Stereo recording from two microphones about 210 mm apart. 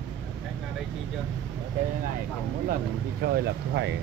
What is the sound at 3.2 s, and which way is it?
Speech, 55° right (ahead or behind).